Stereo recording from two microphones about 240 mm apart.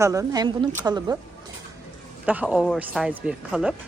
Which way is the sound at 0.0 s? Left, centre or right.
Centre.